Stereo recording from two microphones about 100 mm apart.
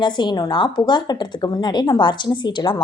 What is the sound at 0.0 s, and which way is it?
Speech, 50° left (ahead or behind).